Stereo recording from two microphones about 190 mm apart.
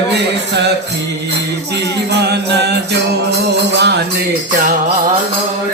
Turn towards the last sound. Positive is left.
turn(degrees=-60)  # may be behind; listen again after turning